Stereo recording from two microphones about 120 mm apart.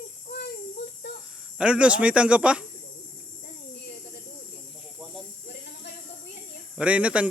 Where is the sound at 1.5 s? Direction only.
10° right (ahead or behind).